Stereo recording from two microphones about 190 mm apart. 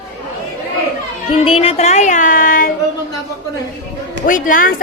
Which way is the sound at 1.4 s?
30° left (ahead or behind).